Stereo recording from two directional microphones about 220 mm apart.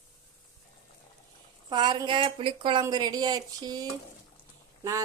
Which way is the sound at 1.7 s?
20° right (ahead or behind).